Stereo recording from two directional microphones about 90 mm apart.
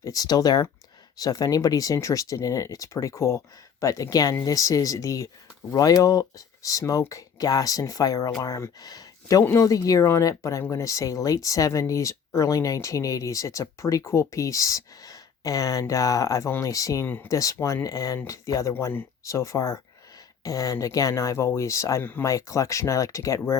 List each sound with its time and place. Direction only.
0.0 s speech: 40° left (ahead or behind)
18.7 s speech: 25° left (ahead or behind)